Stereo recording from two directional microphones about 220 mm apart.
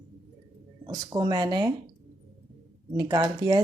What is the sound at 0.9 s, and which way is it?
Speech, 20° right (ahead or behind).